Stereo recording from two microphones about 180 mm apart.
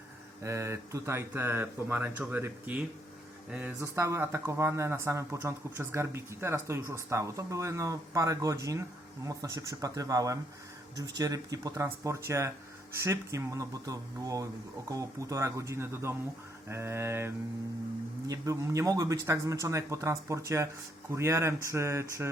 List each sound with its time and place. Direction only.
0.4 s speech: 15° right (ahead or behind)